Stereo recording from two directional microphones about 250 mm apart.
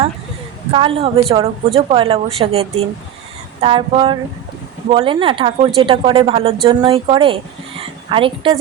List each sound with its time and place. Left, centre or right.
0.7 s a woman's voice: right